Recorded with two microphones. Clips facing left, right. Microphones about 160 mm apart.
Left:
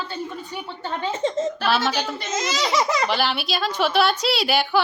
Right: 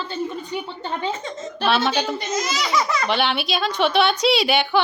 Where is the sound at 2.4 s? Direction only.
25° left (ahead or behind).